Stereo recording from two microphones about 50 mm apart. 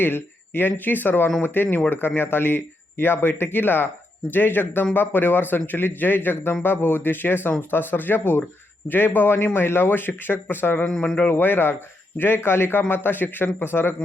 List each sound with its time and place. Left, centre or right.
0.0 s a man's voice: left